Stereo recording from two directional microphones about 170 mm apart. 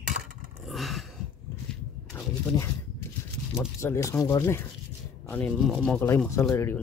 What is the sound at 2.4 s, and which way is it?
Speech, 20° left (ahead or behind).